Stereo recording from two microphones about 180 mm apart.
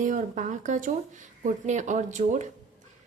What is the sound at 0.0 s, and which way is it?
A woman's voice, 45° right (ahead or behind).